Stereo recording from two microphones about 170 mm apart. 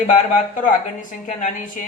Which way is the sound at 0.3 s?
50° left (ahead or behind).